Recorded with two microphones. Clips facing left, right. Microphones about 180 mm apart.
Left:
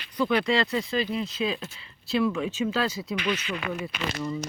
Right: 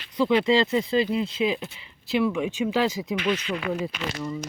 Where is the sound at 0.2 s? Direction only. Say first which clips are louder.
Right 4 dB; 25° right (ahead or behind).